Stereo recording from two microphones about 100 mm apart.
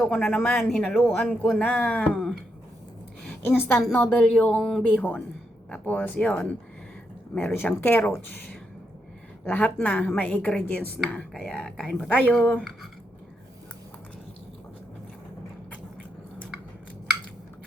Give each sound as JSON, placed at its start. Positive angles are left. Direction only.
{"t": 0.0, "sound": "a woman's voice", "side_deg": 10}
{"t": 3.2, "sound": "a woman's voice", "side_deg": 20}
{"t": 4.2, "sound": "a woman's voice", "side_deg": 10}
{"t": 4.8, "sound": "a woman's voice", "side_deg": 15}